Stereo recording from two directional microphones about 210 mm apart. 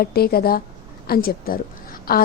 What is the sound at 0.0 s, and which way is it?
A woman's voice, 45° left (ahead or behind).